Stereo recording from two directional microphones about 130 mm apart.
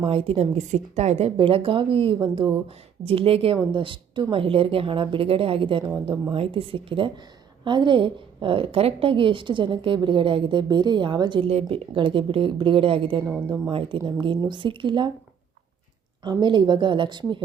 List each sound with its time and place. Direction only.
0.0 s a woman's voice: 45° right (ahead or behind)
16.2 s a woman's voice: 35° right (ahead or behind)